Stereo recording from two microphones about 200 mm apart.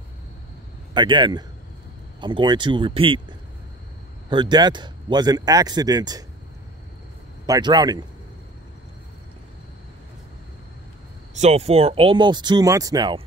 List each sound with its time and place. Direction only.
0.9 s speech: 25° right (ahead or behind)
7.4 s speech: 20° right (ahead or behind)
11.3 s speech: 35° right (ahead or behind)